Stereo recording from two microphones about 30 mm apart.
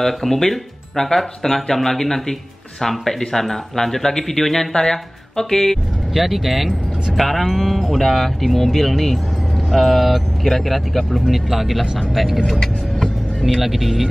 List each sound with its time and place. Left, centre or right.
0.0 s speech: centre
6.1 s speech: centre
13.6 s speech: centre